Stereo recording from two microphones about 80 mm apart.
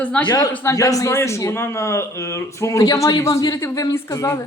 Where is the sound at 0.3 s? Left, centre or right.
Left.